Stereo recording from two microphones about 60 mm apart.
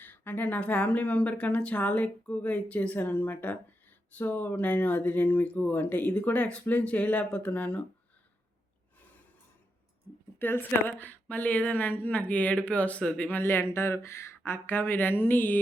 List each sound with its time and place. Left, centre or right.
0.0 s speech: left
10.3 s speech: left
13.3 s speech: left